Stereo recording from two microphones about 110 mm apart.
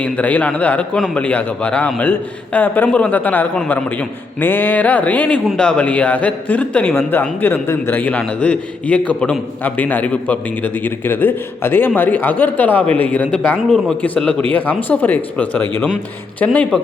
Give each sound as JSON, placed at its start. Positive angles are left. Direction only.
{"t": 0.0, "sound": "speech", "side_deg": 15}